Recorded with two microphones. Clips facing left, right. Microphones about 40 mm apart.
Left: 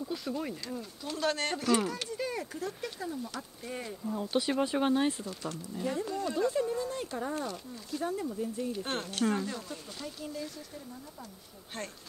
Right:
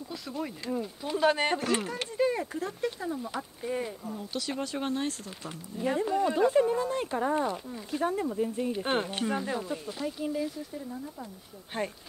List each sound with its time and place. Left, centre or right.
0.1 s speech: centre
0.7 s speech: centre
3.7 s speech: centre
4.3 s speech: left
5.4 s speech: centre
8.0 s speech: right